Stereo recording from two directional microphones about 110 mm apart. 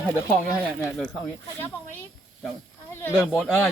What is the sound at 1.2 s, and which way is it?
Speech, 15° left (ahead or behind).